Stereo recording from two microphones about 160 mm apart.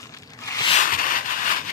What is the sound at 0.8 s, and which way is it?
Rub, 60° left (ahead or behind).